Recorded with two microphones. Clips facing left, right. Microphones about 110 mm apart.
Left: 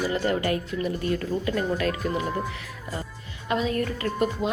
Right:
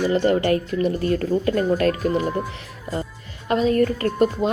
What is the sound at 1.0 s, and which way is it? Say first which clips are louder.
A woman's voice: right 6 dB; 45° right (ahead or behind).